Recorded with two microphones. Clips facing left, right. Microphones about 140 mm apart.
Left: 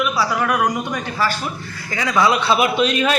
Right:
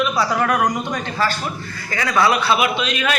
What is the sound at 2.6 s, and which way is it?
Speech, 40° left (ahead or behind).